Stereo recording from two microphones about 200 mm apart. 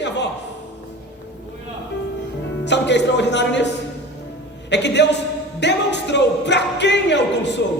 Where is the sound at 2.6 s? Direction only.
60° left (ahead or behind).